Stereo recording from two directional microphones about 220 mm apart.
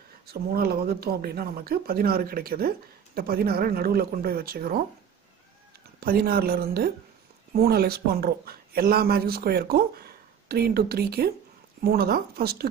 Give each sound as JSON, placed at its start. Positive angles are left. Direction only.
{"t": 0.3, "sound": "speech", "side_deg": -45}
{"t": 5.9, "sound": "speech", "side_deg": -45}